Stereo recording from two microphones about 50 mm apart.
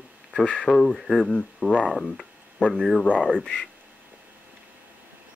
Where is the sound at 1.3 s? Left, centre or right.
Centre.